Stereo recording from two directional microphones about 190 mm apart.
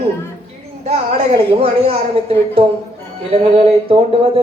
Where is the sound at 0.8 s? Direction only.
35° right (ahead or behind).